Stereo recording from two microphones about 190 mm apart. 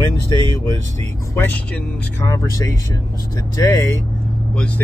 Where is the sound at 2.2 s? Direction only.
15° left (ahead or behind).